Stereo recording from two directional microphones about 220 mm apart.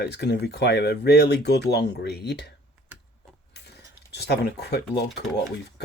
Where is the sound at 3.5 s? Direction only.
50° left (ahead or behind).